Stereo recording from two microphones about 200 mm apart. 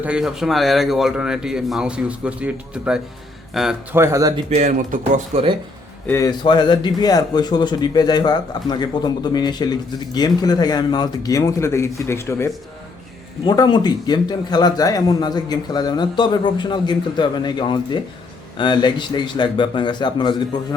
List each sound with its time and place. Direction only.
0.0 s a man's voice: 5° right (ahead or behind)
4.4 s speech: 35° right (ahead or behind)
6.1 s speech: 15° left (ahead or behind)